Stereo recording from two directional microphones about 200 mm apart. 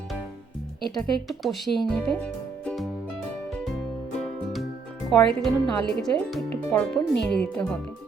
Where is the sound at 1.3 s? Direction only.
Centre (ahead or behind).